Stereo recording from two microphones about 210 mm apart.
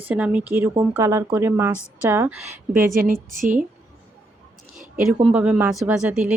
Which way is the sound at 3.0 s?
40° right (ahead or behind).